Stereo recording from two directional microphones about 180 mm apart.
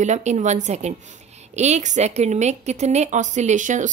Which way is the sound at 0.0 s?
40° right (ahead or behind).